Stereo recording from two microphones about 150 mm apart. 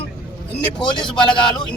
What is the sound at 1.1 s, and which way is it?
Speech, 30° left (ahead or behind).